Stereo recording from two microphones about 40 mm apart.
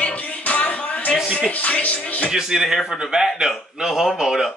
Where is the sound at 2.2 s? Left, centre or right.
Centre.